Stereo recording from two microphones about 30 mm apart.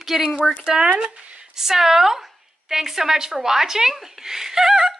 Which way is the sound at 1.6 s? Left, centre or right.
Centre.